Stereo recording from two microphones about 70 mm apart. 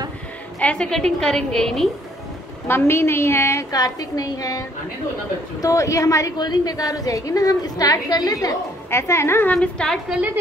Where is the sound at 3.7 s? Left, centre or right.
Left.